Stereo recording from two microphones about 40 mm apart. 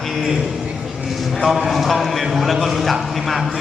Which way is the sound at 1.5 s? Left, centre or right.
Centre.